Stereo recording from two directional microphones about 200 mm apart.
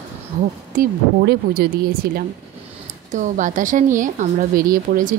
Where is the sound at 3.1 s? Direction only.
40° right (ahead or behind).